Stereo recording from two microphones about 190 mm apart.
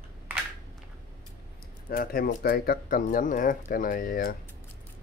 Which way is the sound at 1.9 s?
50° left (ahead or behind).